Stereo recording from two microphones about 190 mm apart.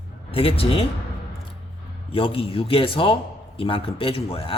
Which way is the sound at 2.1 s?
30° left (ahead or behind).